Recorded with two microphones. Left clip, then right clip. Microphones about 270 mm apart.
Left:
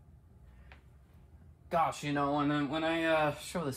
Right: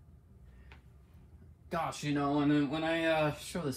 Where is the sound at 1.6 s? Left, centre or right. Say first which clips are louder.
Left 4 dB; left.